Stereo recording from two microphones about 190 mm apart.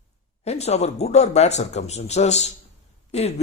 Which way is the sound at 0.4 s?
35° left (ahead or behind).